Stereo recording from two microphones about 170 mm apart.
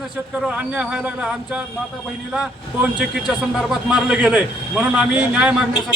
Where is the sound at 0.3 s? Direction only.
10° right (ahead or behind).